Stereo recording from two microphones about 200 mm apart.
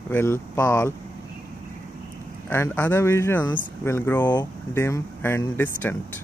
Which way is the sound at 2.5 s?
10° left (ahead or behind).